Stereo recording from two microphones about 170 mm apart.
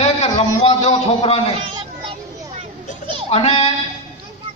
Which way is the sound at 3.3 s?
35° left (ahead or behind).